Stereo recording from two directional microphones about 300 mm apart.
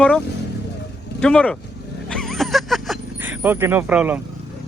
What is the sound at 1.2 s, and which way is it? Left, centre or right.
Speech, centre.